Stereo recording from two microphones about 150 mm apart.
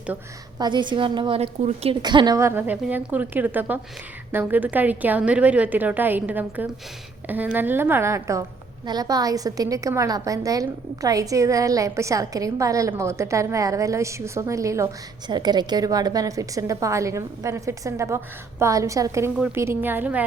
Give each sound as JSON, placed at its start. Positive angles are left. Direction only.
{"t": 0.6, "sound": "a woman's voice", "side_deg": -30}
{"t": 1.4, "sound": "a woman's voice", "side_deg": -45}
{"t": 2.0, "sound": "a woman's voice", "side_deg": -30}